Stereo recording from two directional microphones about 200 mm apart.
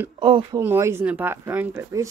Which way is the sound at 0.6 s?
15° right (ahead or behind).